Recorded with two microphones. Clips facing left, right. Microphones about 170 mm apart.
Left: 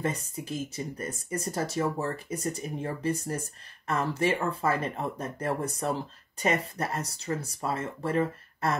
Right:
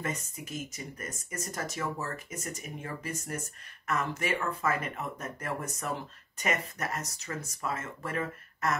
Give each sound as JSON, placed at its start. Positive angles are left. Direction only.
{"t": 0.0, "sound": "speech", "side_deg": 30}